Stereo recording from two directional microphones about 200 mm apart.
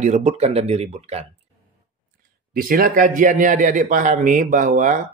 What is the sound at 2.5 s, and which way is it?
Speech, 45° right (ahead or behind).